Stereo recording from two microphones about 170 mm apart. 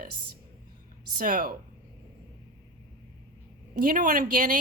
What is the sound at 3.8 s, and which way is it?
Speech, 55° right (ahead or behind).